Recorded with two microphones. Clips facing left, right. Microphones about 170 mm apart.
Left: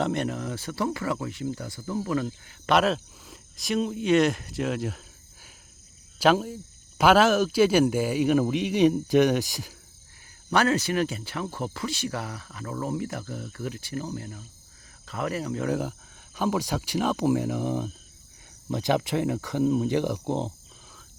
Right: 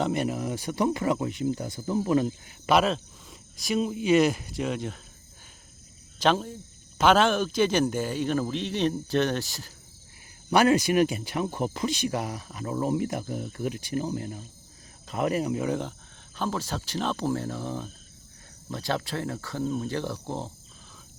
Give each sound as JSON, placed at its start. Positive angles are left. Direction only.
{"t": 0.0, "sound": "speech", "side_deg": -5}
{"t": 2.6, "sound": "speech", "side_deg": 0}
{"t": 6.1, "sound": "a man's voice", "side_deg": 5}
{"t": 10.5, "sound": "speech", "side_deg": -15}
{"t": 15.6, "sound": "a man's voice", "side_deg": 5}